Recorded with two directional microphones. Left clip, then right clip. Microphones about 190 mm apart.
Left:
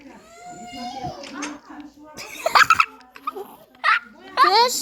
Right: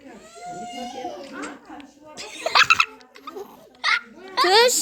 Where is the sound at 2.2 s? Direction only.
45° left (ahead or behind).